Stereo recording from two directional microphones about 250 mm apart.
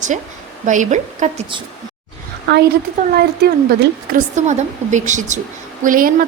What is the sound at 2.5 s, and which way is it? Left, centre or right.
A woman's voice, right.